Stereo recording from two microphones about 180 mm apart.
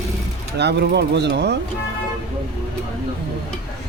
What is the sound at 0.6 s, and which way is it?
Speech, 70° right (ahead or behind).